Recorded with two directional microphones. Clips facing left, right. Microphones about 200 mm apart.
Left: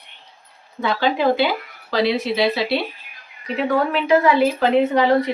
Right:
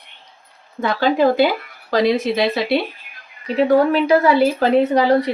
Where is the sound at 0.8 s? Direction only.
45° right (ahead or behind).